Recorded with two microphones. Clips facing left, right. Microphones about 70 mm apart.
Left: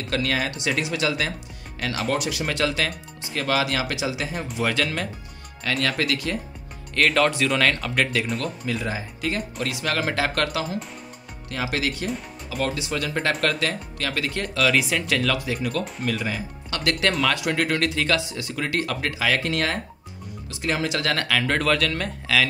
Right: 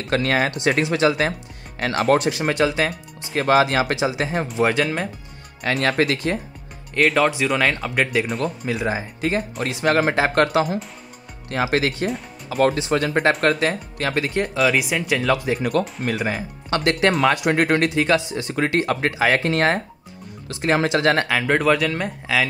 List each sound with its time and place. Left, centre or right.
0.1 s speech: right
2.2 s speech: right
5.8 s speech: right
7.0 s speech: centre
8.3 s speech: centre
8.6 s speech: right
13.3 s speech: right
13.6 s speech: right
15.3 s speech: right